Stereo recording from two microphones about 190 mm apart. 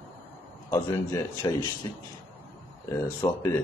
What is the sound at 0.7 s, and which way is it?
Speech, 15° left (ahead or behind).